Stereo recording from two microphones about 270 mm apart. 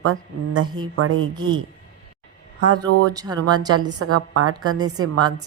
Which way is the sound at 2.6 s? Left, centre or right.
Right.